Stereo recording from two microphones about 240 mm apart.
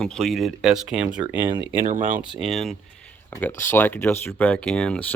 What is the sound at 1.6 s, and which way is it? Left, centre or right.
Speech, right.